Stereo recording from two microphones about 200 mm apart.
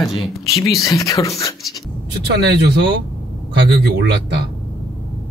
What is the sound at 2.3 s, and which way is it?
Speech, 55° right (ahead or behind).